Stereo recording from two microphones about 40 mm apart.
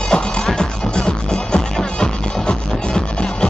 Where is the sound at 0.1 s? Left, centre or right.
Centre.